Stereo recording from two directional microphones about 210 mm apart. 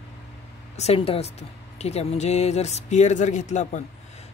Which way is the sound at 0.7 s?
30° left (ahead or behind).